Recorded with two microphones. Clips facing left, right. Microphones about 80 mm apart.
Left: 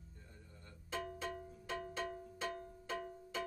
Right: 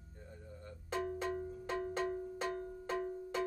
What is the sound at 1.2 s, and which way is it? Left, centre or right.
Cowbell, right.